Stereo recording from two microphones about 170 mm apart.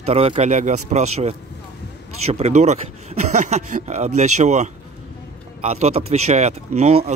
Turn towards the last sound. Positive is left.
turn(degrees=-40)  # may be behind; listen again after turning